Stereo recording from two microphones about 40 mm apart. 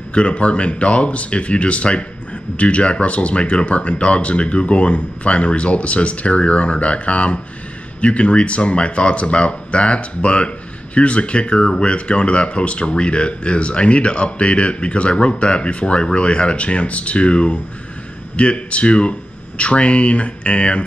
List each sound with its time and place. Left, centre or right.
0.1 s speech: left